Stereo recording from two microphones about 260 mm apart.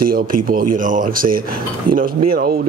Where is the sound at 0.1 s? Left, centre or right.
Right.